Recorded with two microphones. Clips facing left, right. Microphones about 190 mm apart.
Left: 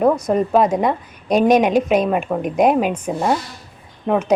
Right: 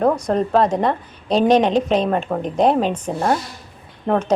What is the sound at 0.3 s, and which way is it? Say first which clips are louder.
A woman's voice: left 1 dB; 10° left (ahead or behind).